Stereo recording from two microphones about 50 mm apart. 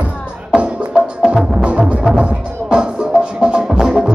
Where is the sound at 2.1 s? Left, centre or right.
Centre.